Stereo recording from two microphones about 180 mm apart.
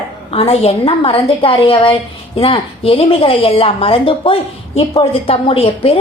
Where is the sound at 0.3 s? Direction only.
35° left (ahead or behind).